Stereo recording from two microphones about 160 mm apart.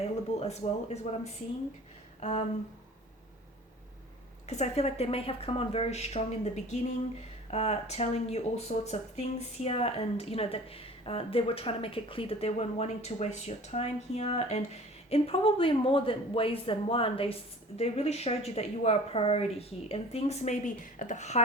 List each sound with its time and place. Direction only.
0.0 s speech: 40° left (ahead or behind)
4.4 s speech: 45° left (ahead or behind)